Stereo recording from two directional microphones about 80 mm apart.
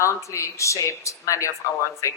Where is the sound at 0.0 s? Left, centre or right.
Left.